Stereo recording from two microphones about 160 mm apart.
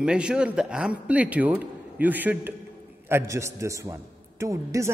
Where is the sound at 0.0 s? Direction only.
5° right (ahead or behind).